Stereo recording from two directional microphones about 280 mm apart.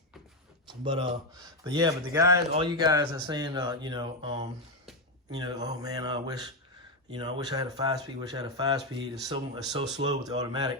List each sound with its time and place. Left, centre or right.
0.7 s speech: centre